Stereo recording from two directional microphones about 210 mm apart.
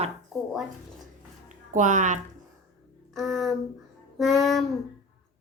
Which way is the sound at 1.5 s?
35° right (ahead or behind).